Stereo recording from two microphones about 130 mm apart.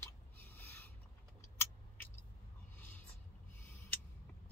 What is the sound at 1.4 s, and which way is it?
Vehicle, 20° left (ahead or behind).